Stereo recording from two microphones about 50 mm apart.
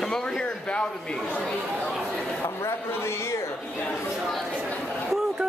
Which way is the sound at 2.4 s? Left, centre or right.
Left.